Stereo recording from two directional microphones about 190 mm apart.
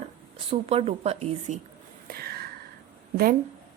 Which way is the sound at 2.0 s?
55° right (ahead or behind).